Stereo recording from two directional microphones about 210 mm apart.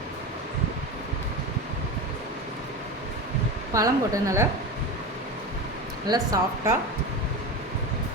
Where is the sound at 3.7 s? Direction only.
15° right (ahead or behind).